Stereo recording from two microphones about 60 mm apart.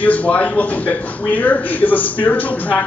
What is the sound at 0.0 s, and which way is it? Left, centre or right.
A man's voice, left.